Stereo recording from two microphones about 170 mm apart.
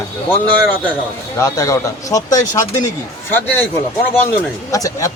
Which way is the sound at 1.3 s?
20° left (ahead or behind).